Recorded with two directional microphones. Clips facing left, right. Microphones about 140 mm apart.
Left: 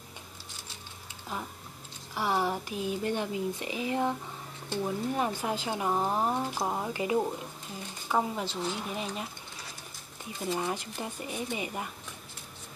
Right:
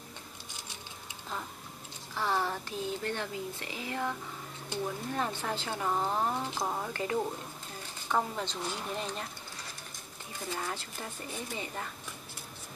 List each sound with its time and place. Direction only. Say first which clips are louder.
2.1 s a woman's voice: left 3 dB; 15° left (ahead or behind)
10.5 s a woman's voice: left 6 dB; 15° left (ahead or behind)